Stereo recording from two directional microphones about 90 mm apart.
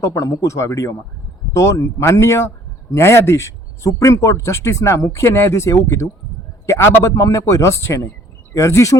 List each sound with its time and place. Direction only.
0.0 s speech: 35° left (ahead or behind)